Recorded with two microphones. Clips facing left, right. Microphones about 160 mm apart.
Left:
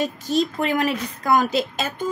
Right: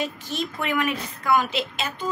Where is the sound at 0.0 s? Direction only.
35° left (ahead or behind).